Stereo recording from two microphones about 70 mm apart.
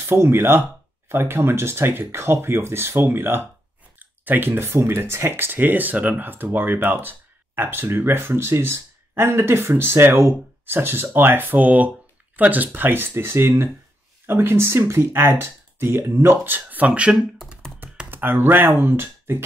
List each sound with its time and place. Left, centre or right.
0.0 s speech: right
16.4 s speech: right
17.2 s computer keyboard: centre
18.1 s speech: right